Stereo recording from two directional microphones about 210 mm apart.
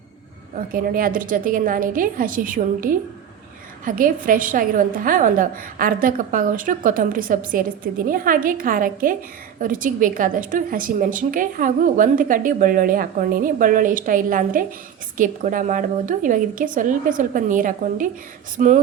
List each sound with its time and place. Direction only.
0.7 s a woman's voice: 45° right (ahead or behind)